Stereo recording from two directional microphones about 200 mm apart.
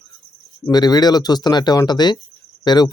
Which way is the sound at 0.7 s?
20° left (ahead or behind).